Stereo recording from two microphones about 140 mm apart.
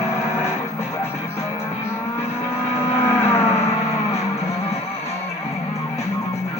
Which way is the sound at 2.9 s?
15° left (ahead or behind).